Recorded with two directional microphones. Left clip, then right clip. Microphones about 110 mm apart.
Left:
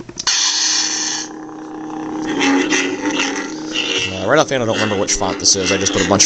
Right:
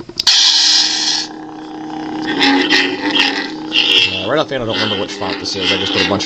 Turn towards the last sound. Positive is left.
turn(degrees=5)  # may be behind; listen again after turning